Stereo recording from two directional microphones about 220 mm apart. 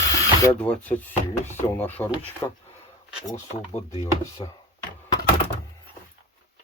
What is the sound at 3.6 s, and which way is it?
Speech, 25° left (ahead or behind).